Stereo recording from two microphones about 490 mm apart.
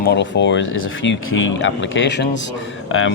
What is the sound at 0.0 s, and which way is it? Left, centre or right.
Speech, left.